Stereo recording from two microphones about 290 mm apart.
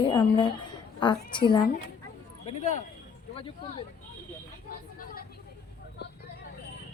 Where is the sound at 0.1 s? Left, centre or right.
Centre.